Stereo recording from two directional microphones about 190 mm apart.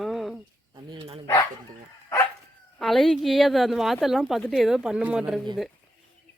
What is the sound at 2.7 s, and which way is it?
Speech, centre (ahead or behind).